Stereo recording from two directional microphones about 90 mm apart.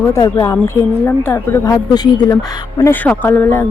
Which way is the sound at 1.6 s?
40° left (ahead or behind).